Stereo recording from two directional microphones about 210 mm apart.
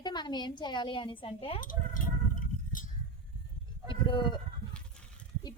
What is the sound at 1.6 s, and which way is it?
Sheep, 40° left (ahead or behind).